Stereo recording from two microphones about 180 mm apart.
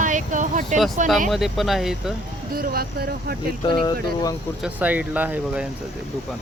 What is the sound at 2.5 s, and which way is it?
Speech, 55° right (ahead or behind).